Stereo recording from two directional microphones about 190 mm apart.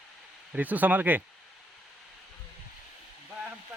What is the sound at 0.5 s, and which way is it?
Speech, 10° right (ahead or behind).